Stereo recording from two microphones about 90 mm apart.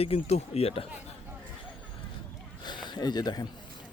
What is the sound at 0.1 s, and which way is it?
Speech, 90° left.